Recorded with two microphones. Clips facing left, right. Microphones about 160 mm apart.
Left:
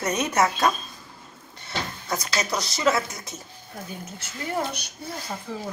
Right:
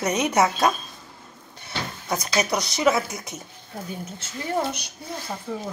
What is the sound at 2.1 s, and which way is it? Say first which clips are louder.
Speech: right 4 dB; 15° right (ahead or behind).